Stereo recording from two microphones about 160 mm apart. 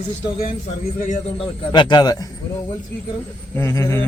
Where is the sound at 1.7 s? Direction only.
25° left (ahead or behind).